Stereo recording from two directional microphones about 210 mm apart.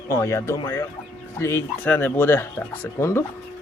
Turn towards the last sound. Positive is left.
turn(degrees=10)  # may be behind; listen again after turning